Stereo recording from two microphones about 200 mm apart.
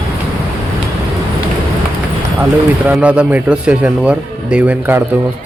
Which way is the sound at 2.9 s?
5° right (ahead or behind).